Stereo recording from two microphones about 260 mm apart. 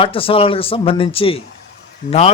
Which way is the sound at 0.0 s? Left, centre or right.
Left.